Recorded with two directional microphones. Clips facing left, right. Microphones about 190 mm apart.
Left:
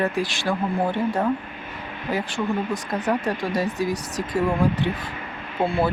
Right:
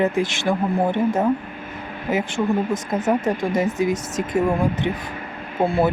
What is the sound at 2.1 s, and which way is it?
Speech, 20° right (ahead or behind).